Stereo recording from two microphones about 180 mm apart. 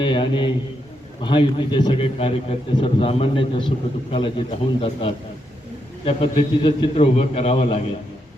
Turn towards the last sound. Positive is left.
turn(degrees=35)  # may be behind; listen again after turning